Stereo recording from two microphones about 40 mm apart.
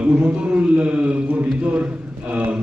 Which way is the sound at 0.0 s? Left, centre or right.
Right.